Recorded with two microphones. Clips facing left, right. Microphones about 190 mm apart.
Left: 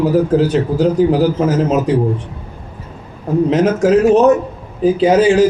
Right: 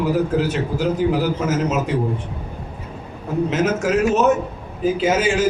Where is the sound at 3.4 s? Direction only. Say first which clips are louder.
Left 7 dB; 35° left (ahead or behind).